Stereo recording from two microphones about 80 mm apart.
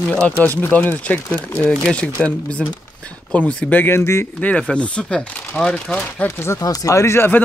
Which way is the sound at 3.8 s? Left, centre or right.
Left.